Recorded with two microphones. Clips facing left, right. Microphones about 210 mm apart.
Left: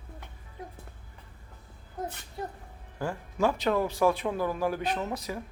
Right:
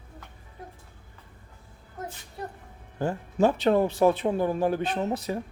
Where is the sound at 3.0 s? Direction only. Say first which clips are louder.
Right 5 dB; 25° right (ahead or behind).